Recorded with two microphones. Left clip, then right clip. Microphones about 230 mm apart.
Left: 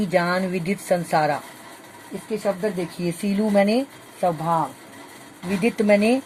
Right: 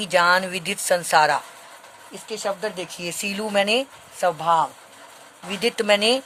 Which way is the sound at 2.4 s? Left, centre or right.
Right.